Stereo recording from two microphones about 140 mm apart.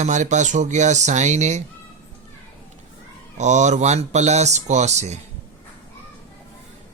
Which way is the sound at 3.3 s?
55° right (ahead or behind).